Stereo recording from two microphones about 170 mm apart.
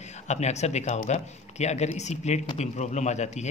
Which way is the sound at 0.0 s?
40° left (ahead or behind).